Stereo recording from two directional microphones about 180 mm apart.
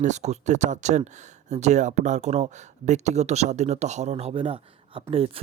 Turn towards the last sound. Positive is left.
turn(degrees=-30)  # may be behind; listen again after turning